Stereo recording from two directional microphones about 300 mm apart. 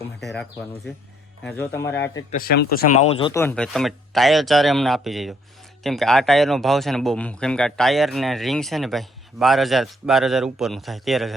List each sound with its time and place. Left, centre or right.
0.2 s speech: centre
1.5 s speech: centre
2.3 s speech: left; by 11.3 s centre